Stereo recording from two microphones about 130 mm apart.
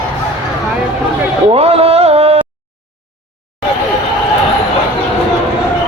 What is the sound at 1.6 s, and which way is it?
Music, 50° right (ahead or behind).